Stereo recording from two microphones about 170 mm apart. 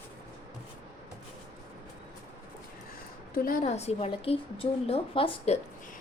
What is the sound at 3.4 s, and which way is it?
A woman's voice, 50° left (ahead or behind).